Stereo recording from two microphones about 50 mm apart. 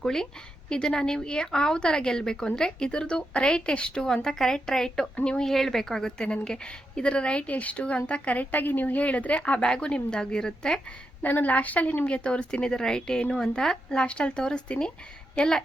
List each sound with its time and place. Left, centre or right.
0.0 s a woman's voice: centre
4.0 s a woman's voice: centre
5.5 s a woman's voice: centre; by 9.4 s left
9.5 s a woman's voice: centre
11.2 s a woman's voice: left; by 15.6 s centre